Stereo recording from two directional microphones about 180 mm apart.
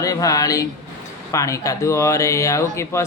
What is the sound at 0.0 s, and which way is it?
Speech, 20° left (ahead or behind).